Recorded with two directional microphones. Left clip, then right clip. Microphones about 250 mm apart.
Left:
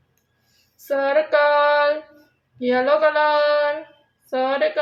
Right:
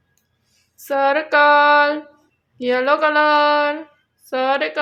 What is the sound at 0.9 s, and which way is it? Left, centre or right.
Speech, right.